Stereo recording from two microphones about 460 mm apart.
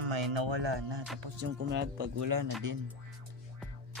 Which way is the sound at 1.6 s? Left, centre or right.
Right.